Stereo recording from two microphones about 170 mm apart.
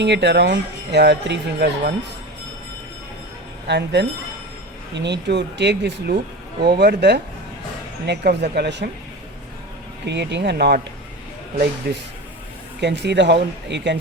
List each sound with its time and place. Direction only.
0.0 s speech: 90° right; by 1.9 s 70° right (ahead or behind)
3.7 s speech: 80° right
10.1 s speech: 90° right
12.8 s speech: 90° right